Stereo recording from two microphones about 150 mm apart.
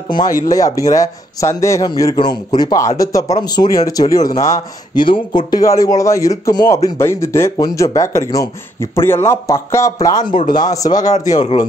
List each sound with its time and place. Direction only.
0.1 s a man's voice: 25° left (ahead or behind)